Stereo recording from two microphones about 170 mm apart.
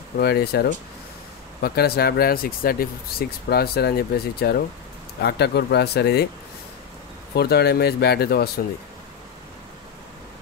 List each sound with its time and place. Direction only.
0.2 s speech: 70° left (ahead or behind)
7.3 s speech: 70° left (ahead or behind)